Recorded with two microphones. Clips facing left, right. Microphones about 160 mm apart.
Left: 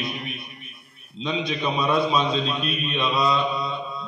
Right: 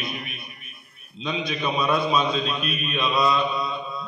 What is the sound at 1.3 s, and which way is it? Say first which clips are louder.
A man's voice: left 1 dB; 30° left (ahead or behind).